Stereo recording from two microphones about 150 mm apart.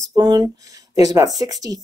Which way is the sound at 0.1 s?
30° right (ahead or behind).